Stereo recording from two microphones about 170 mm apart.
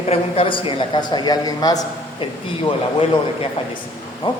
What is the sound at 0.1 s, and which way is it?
A man's voice, 30° left (ahead or behind).